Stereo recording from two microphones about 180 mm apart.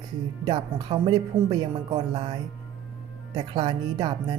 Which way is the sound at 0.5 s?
25° right (ahead or behind).